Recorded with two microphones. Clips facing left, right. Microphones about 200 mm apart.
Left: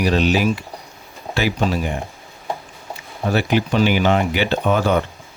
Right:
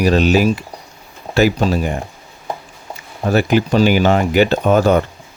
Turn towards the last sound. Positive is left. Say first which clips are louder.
# right 5 dB
turn(degrees=-40)  # may be behind; listen again after turning